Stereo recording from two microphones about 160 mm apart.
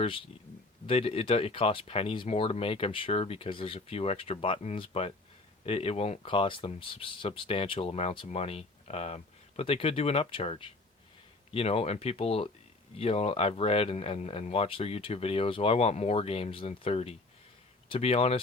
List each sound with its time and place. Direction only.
0.0 s speech: 35° left (ahead or behind)